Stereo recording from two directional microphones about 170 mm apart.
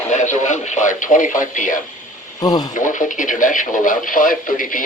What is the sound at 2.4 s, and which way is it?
Speech, 20° left (ahead or behind).